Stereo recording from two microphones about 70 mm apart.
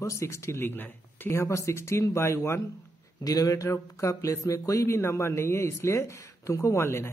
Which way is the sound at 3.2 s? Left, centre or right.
Left.